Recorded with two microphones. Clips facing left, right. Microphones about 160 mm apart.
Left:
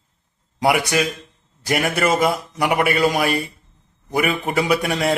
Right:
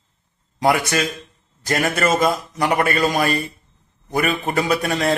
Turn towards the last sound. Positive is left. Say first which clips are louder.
# even
turn(degrees=10)  # may be behind; listen again after turning